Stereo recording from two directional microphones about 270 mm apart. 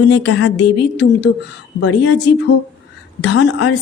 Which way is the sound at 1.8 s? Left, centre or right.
Left.